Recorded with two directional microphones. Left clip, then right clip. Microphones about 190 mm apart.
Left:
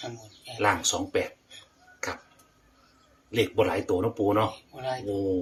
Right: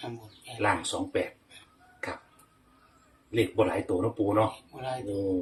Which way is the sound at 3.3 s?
60° left (ahead or behind).